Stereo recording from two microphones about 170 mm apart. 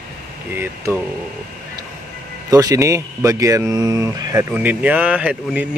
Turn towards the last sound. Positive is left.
turn(degrees=-5)  # may be behind; listen again after turning